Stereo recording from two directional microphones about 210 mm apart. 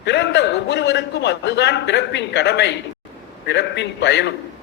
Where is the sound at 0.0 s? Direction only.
55° left (ahead or behind).